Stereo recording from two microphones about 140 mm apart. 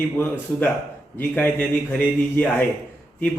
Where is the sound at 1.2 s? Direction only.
10° left (ahead or behind).